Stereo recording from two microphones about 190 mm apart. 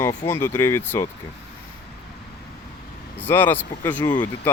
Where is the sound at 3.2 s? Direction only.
10° left (ahead or behind).